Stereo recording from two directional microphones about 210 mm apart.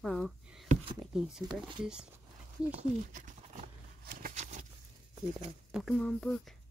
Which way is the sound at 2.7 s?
35° right (ahead or behind).